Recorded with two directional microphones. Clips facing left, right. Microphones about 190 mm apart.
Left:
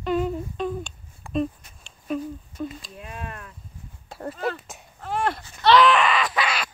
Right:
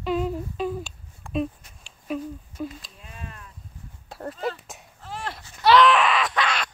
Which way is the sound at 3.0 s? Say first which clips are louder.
Left 8 dB; 60° left (ahead or behind).